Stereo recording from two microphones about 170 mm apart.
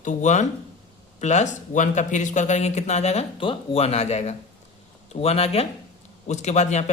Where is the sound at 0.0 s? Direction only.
45° left (ahead or behind).